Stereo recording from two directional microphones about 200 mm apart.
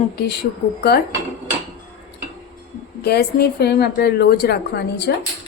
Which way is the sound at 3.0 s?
55° left (ahead or behind).